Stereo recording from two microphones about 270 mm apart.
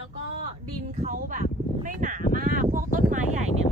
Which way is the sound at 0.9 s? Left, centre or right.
Right.